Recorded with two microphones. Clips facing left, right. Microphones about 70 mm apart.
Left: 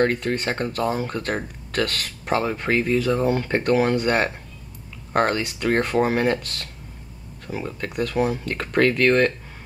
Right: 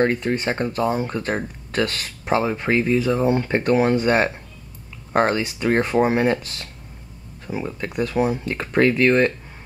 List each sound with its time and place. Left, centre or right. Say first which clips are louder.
0.0 s speech: right 1 dB; centre